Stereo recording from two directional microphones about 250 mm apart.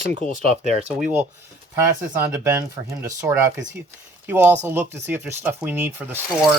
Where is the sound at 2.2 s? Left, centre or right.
Centre.